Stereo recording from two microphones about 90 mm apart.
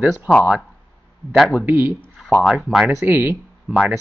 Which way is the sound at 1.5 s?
25° right (ahead or behind).